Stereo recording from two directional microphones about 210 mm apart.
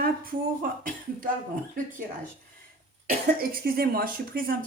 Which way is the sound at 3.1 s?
45° right (ahead or behind).